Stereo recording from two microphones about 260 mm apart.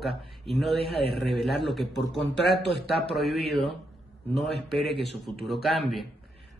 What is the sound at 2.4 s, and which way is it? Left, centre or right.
Speech, left.